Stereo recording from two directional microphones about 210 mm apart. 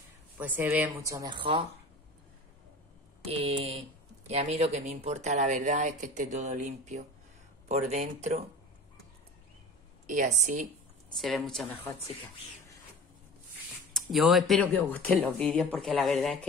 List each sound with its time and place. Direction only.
0.4 s speech: 10° right (ahead or behind); by 1.7 s 25° right (ahead or behind)
3.3 s a sound: 30° right (ahead or behind)
4.3 s speech: 30° right (ahead or behind)
10.0 s speech: 35° right (ahead or behind)
11.1 s speech: centre (ahead or behind)
13.9 s speech: centre (ahead or behind)